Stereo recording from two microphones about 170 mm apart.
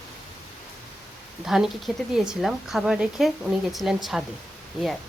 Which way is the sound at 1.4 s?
Centre (ahead or behind).